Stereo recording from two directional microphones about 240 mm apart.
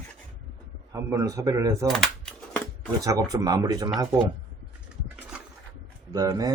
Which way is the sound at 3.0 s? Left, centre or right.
Centre.